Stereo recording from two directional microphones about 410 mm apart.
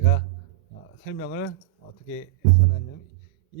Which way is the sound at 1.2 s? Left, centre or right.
Left.